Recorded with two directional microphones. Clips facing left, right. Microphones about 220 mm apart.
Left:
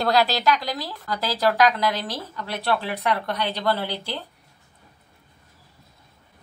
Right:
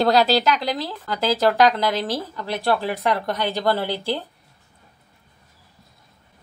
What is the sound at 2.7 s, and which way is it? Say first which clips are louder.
A woman's voice: right 3 dB; 40° right (ahead or behind).